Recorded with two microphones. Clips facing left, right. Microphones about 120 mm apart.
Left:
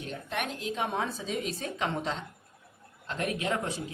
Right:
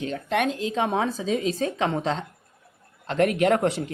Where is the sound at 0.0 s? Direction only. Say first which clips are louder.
Right 10 dB; 90° right.